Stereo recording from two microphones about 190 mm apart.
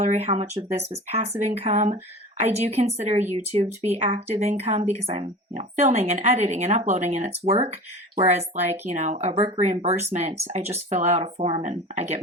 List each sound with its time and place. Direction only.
0.0 s speech: 35° right (ahead or behind)